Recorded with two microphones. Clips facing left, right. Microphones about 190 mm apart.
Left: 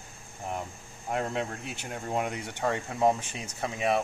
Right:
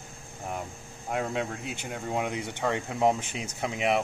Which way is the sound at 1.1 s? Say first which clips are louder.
Right 1 dB; 5° right (ahead or behind).